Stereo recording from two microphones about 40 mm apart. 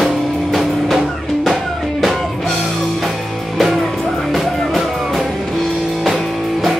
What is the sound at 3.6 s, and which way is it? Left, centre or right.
Music, centre.